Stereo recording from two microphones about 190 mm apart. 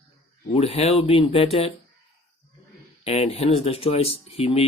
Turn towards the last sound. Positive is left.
turn(degrees=30)  # may be behind; listen again after turning